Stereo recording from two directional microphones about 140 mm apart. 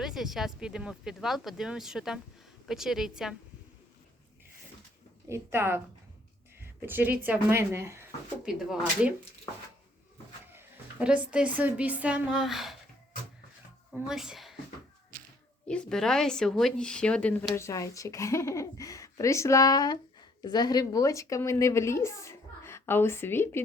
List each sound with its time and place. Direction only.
0.0 s speech: centre (ahead or behind)
5.3 s speech: 15° right (ahead or behind)
8.4 s speech: 5° right (ahead or behind)
11.0 s speech: 10° right (ahead or behind)
14.1 s speech: 5° right (ahead or behind)
15.6 s a woman's voice: 5° left (ahead or behind)